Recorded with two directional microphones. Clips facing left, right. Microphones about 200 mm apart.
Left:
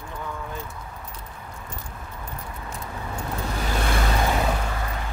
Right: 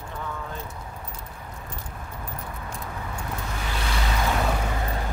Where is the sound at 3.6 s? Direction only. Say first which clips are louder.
Left 6 dB; 45° left (ahead or behind).